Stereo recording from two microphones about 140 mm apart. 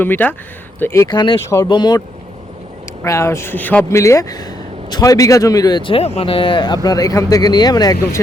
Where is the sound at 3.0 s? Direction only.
20° left (ahead or behind).